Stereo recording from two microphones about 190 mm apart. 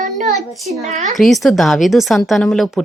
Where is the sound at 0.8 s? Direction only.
40° right (ahead or behind).